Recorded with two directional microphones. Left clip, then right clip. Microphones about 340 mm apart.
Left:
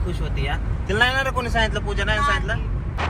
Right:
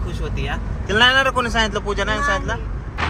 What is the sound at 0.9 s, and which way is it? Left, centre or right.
Speech, right.